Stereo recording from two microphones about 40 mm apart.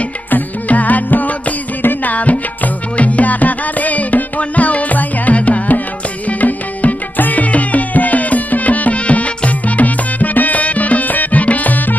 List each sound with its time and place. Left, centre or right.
0.3 s music: left
1.8 s music: left
2.1 s music: left